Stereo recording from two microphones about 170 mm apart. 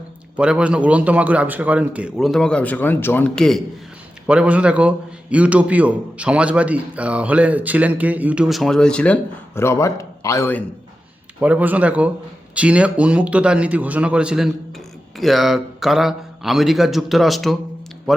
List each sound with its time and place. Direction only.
0.3 s a man's voice: 5° right (ahead or behind)
4.3 s a man's voice: 5° right (ahead or behind)
9.6 s speech: 15° left (ahead or behind)
11.3 s a man's voice: 10° right (ahead or behind)